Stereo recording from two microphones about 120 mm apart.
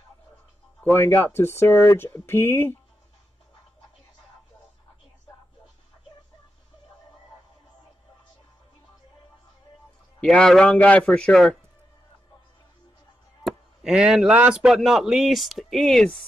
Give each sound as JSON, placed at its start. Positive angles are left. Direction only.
{"t": 0.8, "sound": "speech", "side_deg": 15}
{"t": 10.2, "sound": "a man's voice", "side_deg": 5}
{"t": 13.4, "sound": "speech", "side_deg": -5}